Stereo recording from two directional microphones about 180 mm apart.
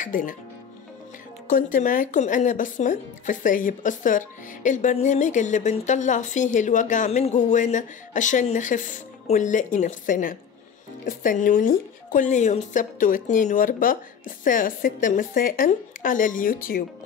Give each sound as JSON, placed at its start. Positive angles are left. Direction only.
{"t": 0.0, "sound": "speech", "side_deg": 50}
{"t": 1.5, "sound": "speech", "side_deg": 50}